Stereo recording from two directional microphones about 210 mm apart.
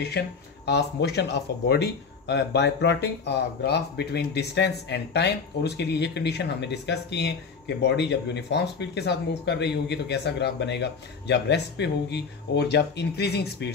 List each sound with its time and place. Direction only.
0.2 s speech: 50° left (ahead or behind)